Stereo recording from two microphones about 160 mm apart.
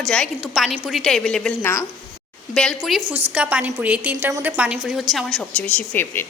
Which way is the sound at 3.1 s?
10° right (ahead or behind).